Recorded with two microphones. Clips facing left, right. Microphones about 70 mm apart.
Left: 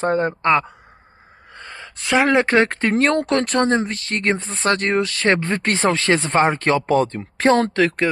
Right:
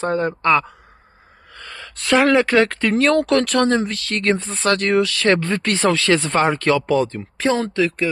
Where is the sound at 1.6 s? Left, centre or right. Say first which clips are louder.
Even; left.